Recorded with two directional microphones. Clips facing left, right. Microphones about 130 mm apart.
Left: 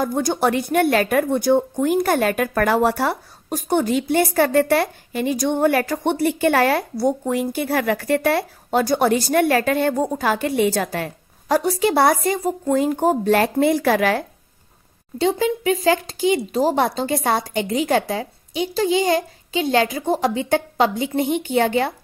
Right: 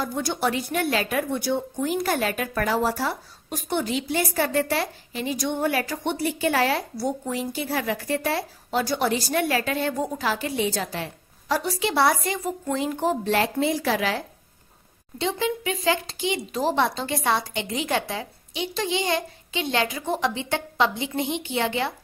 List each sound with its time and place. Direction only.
0.0 s a woman's voice: 45° left (ahead or behind)
3.4 s a woman's voice: 45° left (ahead or behind); by 8.5 s 60° left (ahead or behind)
8.6 s a woman's voice: 45° left (ahead or behind)
15.1 s a woman's voice: 40° left (ahead or behind)